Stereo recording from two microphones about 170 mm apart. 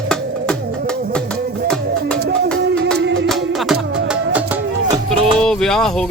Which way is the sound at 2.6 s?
90° right.